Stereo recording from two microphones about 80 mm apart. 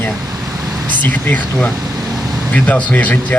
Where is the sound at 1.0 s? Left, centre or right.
Left.